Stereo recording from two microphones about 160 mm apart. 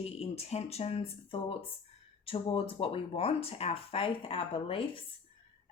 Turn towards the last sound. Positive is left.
turn(degrees=35)  # may be behind; listen again after turning